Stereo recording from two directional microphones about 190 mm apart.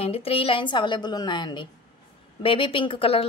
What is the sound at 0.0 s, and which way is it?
A woman's voice, 30° left (ahead or behind).